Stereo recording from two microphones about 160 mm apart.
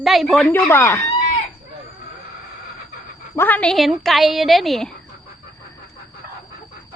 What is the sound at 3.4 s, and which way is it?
Speech, 10° left (ahead or behind).